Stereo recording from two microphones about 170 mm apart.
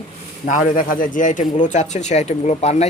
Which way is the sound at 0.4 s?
50° left (ahead or behind).